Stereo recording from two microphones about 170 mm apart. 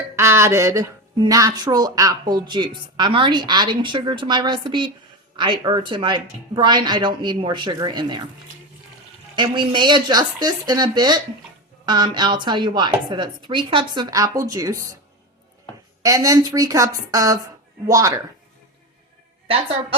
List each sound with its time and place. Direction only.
0.2 s speech: 15° right (ahead or behind)
9.3 s speech: 25° right (ahead or behind)
16.0 s speech: 20° right (ahead or behind)